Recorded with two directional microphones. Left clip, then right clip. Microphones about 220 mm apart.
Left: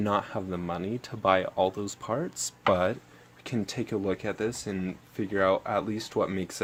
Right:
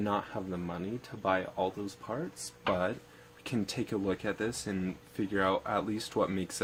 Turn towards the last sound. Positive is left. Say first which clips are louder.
# left 3 dB
turn(degrees=15)  # may be behind; listen again after turning